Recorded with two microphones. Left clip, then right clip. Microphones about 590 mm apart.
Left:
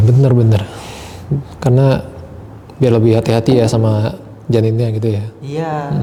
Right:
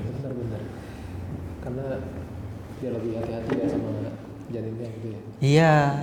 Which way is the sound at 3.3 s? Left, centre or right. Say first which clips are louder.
Left 18 dB; left.